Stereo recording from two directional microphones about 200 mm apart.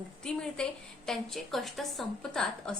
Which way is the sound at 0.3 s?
5° left (ahead or behind).